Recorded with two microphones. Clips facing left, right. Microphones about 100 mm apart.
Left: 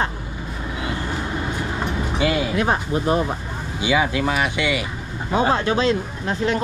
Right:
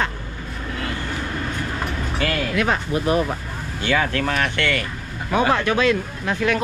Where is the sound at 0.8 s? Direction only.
15° left (ahead or behind).